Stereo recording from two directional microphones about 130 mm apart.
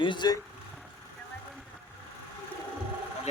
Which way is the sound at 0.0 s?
35° left (ahead or behind).